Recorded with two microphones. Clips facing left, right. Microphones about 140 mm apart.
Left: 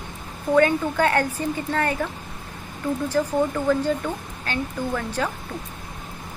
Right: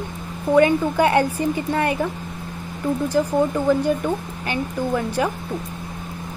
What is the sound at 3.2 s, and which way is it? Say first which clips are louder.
Speech: right 2 dB; 15° right (ahead or behind).